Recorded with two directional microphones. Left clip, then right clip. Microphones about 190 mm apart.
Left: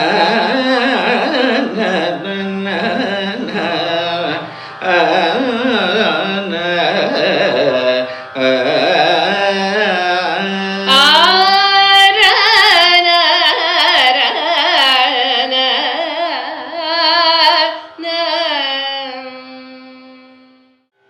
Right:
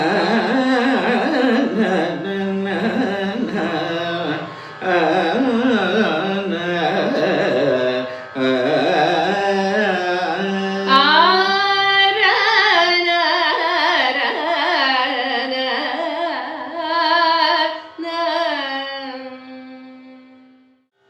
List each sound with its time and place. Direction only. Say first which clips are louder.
0.0 s carnatic music: left 5 dB; 15° right (ahead or behind)
6.5 s music: left 6 dB; 20° right (ahead or behind)